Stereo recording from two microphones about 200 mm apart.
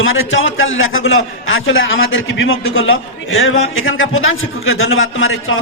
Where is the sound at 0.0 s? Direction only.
80° left.